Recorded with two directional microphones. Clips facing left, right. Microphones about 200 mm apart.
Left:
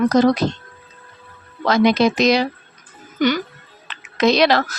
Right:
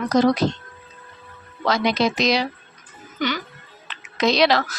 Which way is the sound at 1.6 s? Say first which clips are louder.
Left 5 dB; 55° left (ahead or behind).